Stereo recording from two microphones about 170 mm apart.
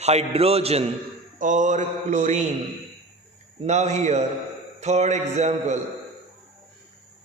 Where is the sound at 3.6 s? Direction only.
40° right (ahead or behind).